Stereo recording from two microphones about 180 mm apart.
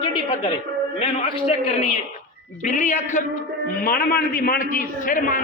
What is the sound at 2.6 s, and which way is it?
Speech, 45° left (ahead or behind).